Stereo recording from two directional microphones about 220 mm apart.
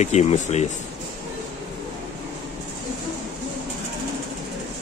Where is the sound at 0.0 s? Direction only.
30° left (ahead or behind).